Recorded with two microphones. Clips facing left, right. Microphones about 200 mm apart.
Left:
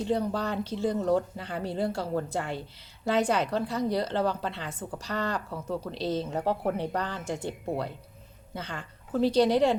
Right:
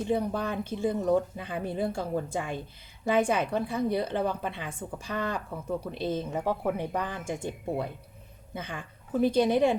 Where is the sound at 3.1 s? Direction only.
50° right (ahead or behind).